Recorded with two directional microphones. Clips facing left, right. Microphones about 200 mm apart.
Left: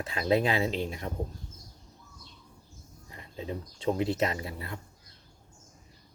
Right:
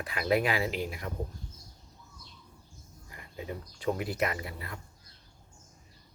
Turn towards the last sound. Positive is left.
turn(degrees=25)  # may be behind; listen again after turning